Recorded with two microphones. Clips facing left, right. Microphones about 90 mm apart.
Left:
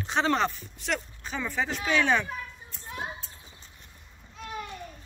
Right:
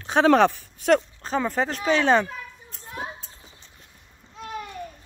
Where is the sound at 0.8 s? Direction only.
45° right (ahead or behind).